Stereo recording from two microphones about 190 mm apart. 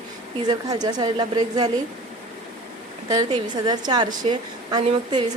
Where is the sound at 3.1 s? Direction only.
20° right (ahead or behind).